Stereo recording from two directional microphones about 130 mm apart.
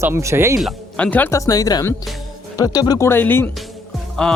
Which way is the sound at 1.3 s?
25° left (ahead or behind).